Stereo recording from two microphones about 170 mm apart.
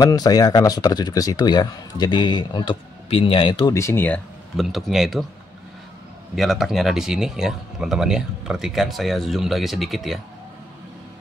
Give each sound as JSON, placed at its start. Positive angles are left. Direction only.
{"t": 0.0, "sound": "speech", "side_deg": 20}
{"t": 4.6, "sound": "speech", "side_deg": 0}
{"t": 6.3, "sound": "speech", "side_deg": 0}